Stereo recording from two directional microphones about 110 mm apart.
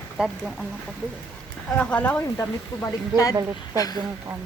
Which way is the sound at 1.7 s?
10° left (ahead or behind).